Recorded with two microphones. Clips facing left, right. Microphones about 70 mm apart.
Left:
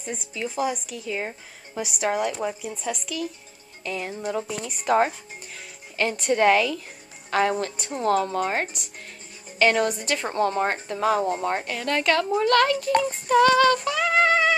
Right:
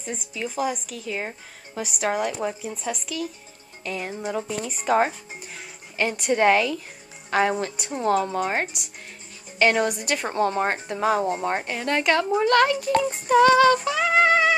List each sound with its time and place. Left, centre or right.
0.0 s speech: centre
4.4 s speech: centre
4.8 s speech: centre
10.3 s speech: centre